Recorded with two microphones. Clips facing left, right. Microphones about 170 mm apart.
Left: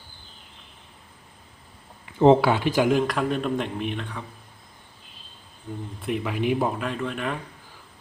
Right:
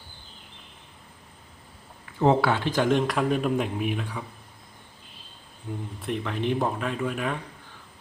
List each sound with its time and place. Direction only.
2.2 s speech: 20° left (ahead or behind)
3.0 s speech: centre (ahead or behind)
6.0 s speech: 5° left (ahead or behind)